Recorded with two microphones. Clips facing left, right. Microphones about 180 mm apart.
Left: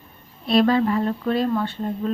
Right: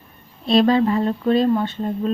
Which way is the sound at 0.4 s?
25° right (ahead or behind).